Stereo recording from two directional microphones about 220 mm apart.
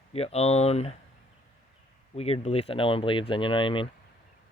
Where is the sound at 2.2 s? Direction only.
25° left (ahead or behind).